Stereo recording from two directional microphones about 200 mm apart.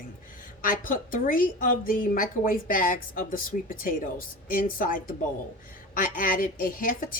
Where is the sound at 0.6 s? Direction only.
45° left (ahead or behind).